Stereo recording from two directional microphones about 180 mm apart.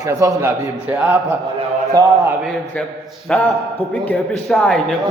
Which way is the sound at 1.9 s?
20° right (ahead or behind).